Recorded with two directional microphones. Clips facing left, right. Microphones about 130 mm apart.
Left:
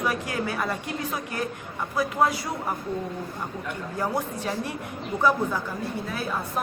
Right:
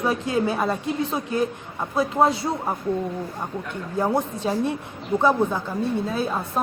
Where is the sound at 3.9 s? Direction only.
25° right (ahead or behind).